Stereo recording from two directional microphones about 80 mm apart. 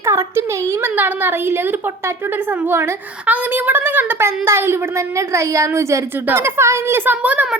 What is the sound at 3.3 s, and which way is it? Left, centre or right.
A woman's voice, right.